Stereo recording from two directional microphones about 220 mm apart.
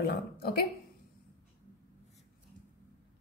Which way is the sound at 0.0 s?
45° left (ahead or behind).